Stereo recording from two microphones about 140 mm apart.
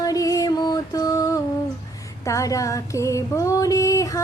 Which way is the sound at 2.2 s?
20° left (ahead or behind).